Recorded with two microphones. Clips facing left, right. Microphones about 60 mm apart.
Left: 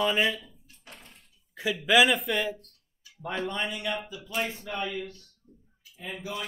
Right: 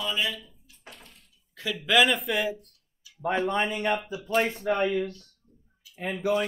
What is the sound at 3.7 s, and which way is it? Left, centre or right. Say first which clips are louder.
Speech: right 5 dB; right.